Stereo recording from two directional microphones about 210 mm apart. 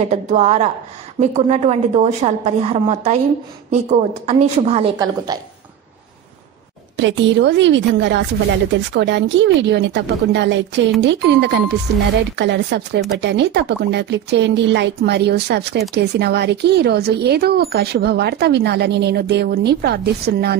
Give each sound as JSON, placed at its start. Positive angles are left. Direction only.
{"t": 0.1, "sound": "a woman's voice", "side_deg": -30}
{"t": 7.0, "sound": "speech", "side_deg": -60}